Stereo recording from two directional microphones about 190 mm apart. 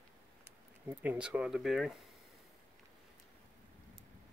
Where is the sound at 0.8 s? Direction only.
5° right (ahead or behind).